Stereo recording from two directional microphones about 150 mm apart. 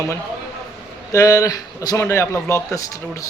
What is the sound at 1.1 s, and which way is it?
A man's voice, 20° left (ahead or behind).